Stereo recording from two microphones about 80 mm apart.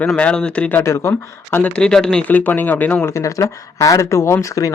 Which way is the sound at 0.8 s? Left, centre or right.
Left.